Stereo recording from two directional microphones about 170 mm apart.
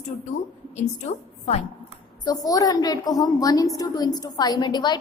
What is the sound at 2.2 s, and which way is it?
A woman's voice, 20° left (ahead or behind).